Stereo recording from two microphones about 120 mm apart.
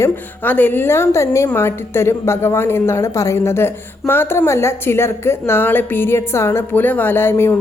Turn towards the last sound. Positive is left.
turn(degrees=20)  # may be behind; listen again after turning